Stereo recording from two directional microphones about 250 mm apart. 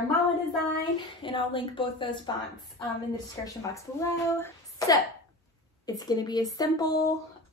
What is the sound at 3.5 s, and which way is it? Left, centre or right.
A woman's voice, centre.